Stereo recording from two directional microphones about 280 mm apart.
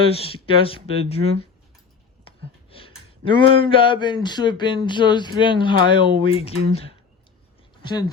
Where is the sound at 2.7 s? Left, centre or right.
Centre.